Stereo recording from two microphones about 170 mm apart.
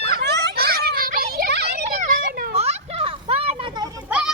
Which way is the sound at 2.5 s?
40° right (ahead or behind).